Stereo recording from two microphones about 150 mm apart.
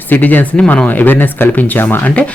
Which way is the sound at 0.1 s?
10° left (ahead or behind).